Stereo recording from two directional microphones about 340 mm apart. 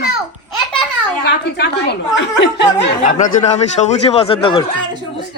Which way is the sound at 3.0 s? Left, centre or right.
Centre.